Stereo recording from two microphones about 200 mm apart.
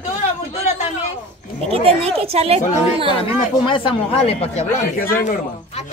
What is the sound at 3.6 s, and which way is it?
Speech, 25° left (ahead or behind).